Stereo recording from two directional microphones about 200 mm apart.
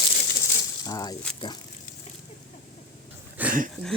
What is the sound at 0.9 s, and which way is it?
Speech, 15° left (ahead or behind).